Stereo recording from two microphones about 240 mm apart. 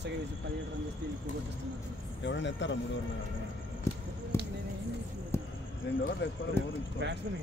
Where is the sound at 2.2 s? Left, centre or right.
Left.